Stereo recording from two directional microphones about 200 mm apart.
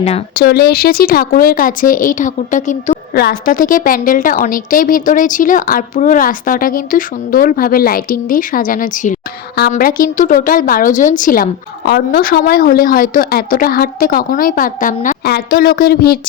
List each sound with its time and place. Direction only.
0.3 s a woman's voice: 50° left (ahead or behind)